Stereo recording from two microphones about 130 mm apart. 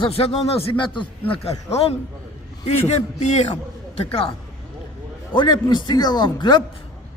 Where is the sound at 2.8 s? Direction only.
60° left (ahead or behind).